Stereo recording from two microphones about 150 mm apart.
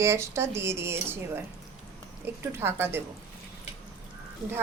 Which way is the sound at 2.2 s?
15° right (ahead or behind).